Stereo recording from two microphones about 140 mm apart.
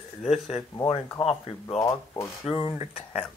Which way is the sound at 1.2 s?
45° left (ahead or behind).